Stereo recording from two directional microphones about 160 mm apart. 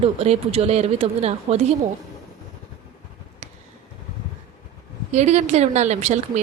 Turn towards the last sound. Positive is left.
turn(degrees=-45)  # may be behind; listen again after turning